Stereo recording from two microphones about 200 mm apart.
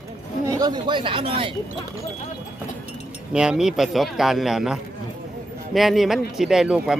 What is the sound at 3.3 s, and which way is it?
Speech, 5° right (ahead or behind).